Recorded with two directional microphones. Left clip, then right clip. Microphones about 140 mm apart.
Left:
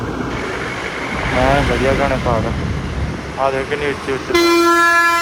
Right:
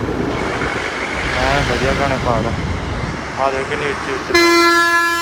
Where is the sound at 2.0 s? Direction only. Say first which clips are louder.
Even; 5° right (ahead or behind).